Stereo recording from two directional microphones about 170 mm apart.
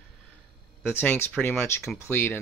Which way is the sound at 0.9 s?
10° left (ahead or behind).